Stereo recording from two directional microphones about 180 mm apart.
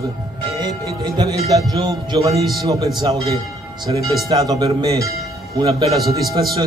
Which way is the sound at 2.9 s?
20° right (ahead or behind).